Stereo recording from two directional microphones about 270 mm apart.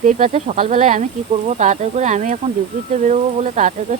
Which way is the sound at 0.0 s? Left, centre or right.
Right.